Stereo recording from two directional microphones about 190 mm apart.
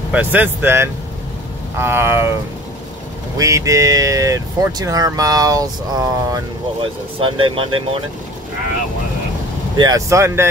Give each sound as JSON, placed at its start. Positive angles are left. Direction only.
{"t": 0.1, "sound": "speech", "side_deg": -10}
{"t": 3.3, "sound": "speech", "side_deg": -15}
{"t": 9.8, "sound": "speech", "side_deg": -20}